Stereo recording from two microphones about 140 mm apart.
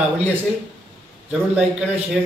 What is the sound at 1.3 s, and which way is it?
Speech, centre (ahead or behind).